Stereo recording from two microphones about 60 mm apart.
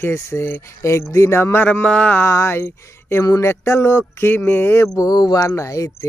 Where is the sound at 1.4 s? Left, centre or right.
Left.